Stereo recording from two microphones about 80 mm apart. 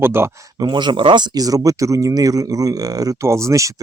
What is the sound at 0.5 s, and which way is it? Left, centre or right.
Speech, right.